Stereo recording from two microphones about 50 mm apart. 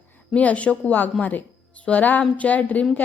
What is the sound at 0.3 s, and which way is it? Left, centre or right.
Speech, left.